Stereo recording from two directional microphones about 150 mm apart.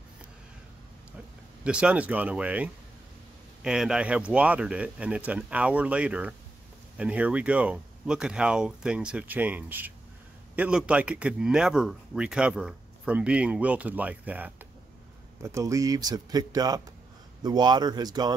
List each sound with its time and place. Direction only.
1.6 s speech: 5° right (ahead or behind)
15.4 s speech: 20° right (ahead or behind)